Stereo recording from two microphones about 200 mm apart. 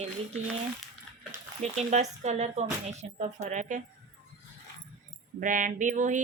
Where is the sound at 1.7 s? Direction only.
35° right (ahead or behind).